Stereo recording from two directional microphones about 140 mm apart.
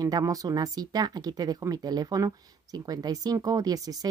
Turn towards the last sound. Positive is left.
turn(degrees=-25)  # may be behind; listen again after turning